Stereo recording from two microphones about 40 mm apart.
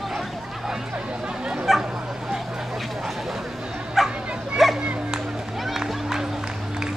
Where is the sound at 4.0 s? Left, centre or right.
Centre.